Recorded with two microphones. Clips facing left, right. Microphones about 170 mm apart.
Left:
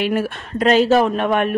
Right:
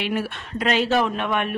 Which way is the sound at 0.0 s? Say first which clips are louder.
Left 6 dB; 45° left (ahead or behind).